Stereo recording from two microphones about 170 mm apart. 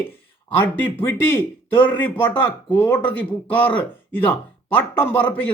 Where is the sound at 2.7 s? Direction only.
10° left (ahead or behind).